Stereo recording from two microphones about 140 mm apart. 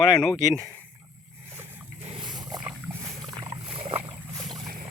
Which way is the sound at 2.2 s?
30° right (ahead or behind).